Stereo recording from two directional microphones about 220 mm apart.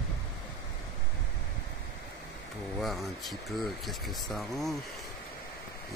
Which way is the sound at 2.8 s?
Centre (ahead or behind).